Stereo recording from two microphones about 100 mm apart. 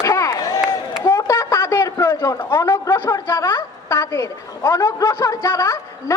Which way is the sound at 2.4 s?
25° left (ahead or behind).